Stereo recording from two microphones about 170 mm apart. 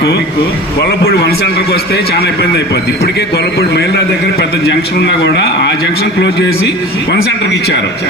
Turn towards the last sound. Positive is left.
turn(degrees=75)  # may be behind; listen again after turning